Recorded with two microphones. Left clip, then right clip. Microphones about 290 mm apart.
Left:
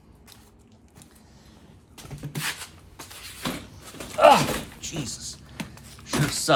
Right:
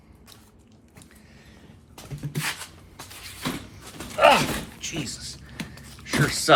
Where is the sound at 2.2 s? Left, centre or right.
Centre.